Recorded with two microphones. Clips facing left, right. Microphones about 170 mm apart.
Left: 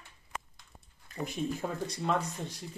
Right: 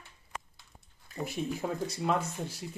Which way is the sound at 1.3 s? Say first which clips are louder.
Right 1 dB; 5° right (ahead or behind).